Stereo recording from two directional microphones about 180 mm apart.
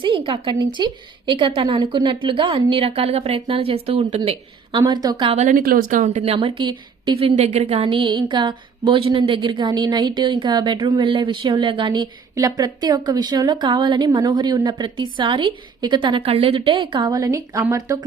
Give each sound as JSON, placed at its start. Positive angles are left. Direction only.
{"t": 0.0, "sound": "a woman's voice", "side_deg": -30}